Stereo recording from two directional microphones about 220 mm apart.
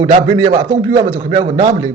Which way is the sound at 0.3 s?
15° right (ahead or behind).